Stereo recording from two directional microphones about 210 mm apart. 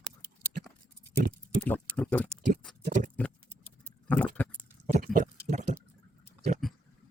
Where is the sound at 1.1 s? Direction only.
40° right (ahead or behind).